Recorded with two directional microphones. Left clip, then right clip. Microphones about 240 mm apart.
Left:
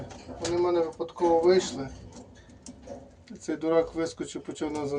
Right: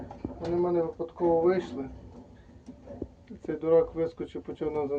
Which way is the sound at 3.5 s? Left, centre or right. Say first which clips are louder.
Right 1 dB; centre.